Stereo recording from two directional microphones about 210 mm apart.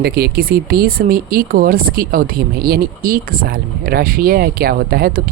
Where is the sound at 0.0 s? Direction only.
45° right (ahead or behind).